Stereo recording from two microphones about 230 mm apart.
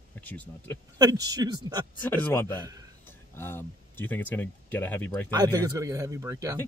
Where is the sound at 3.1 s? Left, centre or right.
Centre.